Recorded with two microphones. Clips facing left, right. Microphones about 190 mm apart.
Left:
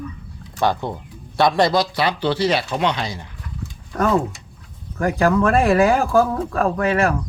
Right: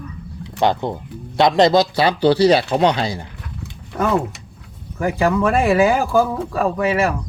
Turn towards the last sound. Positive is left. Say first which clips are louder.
# even
turn(degrees=-5)  # may be behind; listen again after turning